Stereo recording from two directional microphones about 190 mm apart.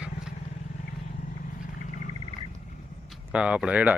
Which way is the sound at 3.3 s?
5° right (ahead or behind).